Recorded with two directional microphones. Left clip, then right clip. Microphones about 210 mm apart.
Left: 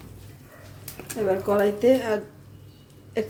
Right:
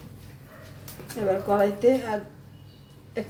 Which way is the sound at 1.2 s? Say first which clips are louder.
Even; 20° left (ahead or behind).